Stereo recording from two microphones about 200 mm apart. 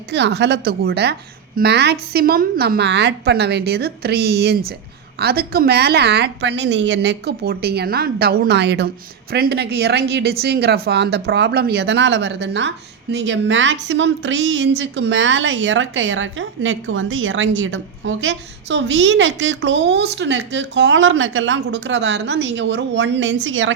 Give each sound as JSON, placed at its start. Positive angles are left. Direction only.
{"t": 0.1, "sound": "a woman's voice", "side_deg": -60}